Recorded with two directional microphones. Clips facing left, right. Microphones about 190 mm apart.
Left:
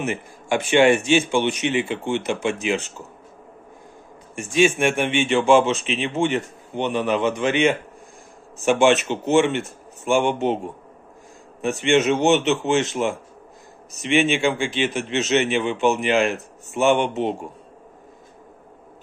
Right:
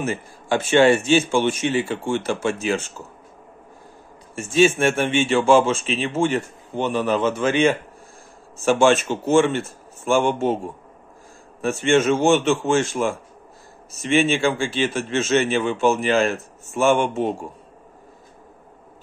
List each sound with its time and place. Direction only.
0.0 s a man's voice: 15° left (ahead or behind)
4.4 s a man's voice: 15° left (ahead or behind)